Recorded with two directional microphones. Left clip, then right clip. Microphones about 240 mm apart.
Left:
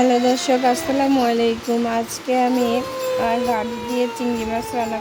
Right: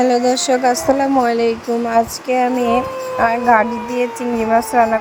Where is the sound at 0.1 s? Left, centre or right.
Right.